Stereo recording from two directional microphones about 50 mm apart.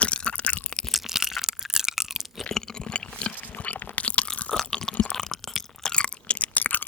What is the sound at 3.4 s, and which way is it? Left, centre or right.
Biting, left.